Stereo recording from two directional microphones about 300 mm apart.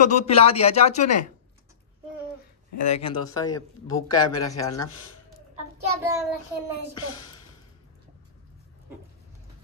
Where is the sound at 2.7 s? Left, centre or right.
Left.